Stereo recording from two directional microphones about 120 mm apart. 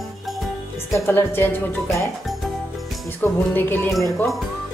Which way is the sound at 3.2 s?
15° left (ahead or behind).